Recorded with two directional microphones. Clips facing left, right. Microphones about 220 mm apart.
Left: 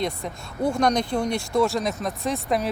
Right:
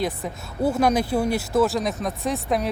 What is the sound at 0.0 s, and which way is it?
Speech, 5° right (ahead or behind).